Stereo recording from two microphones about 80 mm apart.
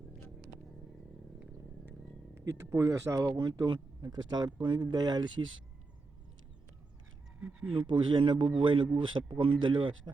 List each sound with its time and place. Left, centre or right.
2.3 s speech: right
3.3 s speech: right
7.3 s a sound: centre
7.7 s speech: right